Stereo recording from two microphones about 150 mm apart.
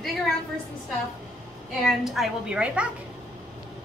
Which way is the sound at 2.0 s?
Centre (ahead or behind).